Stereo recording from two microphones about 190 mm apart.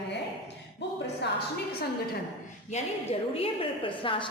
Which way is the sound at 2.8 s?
35° left (ahead or behind).